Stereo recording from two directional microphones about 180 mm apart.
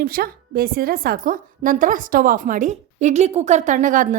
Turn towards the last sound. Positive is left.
turn(degrees=-45)  # may be behind; listen again after turning